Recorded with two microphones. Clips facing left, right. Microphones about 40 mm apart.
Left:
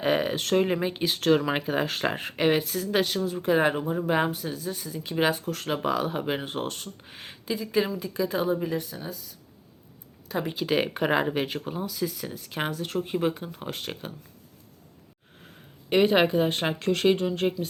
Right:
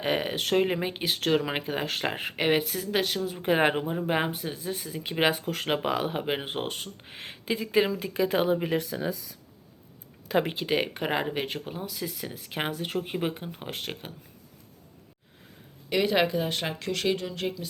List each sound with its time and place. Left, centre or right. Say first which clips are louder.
0.0 s speech: left 3 dB; centre
3.4 s speech: even; right
3.9 s speech: left 2 dB; centre; by 7.9 s right
7.9 s speech: right 2 dB; right
8.9 s speech: right 7 dB; right
10.6 s speech: left 2 dB; centre
15.9 s speech: left 4 dB; left